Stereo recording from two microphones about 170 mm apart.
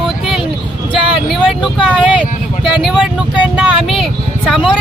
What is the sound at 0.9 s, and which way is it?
Speech, 30° left (ahead or behind).